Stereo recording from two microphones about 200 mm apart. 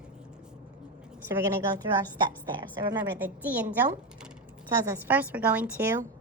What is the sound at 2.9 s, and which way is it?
A woman's voice, 10° right (ahead or behind).